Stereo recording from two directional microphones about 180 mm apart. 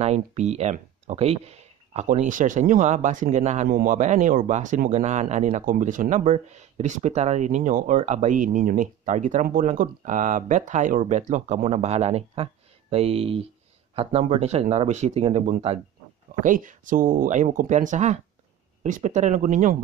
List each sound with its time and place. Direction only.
0.0 s speech: 40° right (ahead or behind)
16.4 s speech: 45° right (ahead or behind)